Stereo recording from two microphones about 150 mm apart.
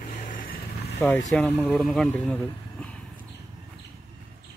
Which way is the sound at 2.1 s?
10° left (ahead or behind).